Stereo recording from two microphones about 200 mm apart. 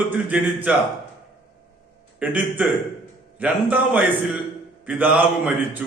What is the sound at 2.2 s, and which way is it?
A man's voice, 10° right (ahead or behind).